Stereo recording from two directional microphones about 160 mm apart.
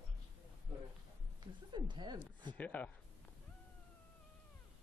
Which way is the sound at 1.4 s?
30° right (ahead or behind).